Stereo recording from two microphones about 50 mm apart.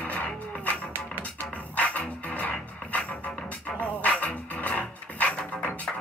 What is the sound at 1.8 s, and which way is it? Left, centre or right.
Music, left.